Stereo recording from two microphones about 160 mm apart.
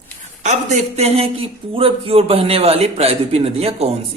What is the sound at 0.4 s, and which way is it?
A man's voice, 45° right (ahead or behind).